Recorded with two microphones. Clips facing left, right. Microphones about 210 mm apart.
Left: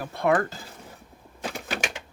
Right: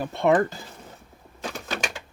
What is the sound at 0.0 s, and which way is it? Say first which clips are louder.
Speech: right 3 dB; 20° right (ahead or behind).